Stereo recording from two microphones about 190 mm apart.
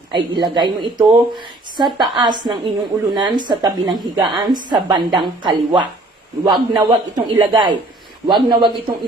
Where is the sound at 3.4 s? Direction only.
20° right (ahead or behind).